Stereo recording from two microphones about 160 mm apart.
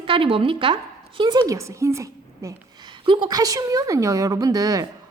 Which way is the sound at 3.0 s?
30° right (ahead or behind).